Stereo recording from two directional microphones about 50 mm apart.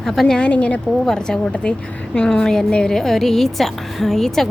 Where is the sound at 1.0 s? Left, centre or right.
Centre.